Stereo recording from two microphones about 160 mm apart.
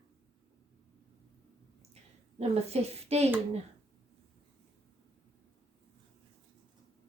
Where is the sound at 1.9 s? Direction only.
40° right (ahead or behind).